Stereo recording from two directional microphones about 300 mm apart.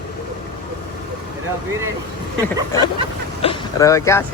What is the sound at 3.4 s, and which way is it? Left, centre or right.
Speech, centre.